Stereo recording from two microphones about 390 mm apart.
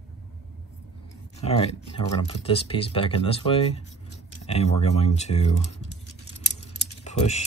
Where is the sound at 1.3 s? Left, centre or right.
Centre.